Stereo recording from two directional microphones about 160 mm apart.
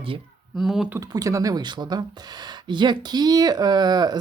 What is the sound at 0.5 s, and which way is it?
Speech, centre (ahead or behind).